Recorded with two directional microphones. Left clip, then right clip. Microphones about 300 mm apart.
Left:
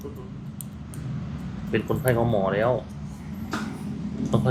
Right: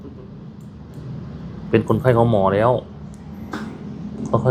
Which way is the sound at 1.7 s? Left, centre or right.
Right.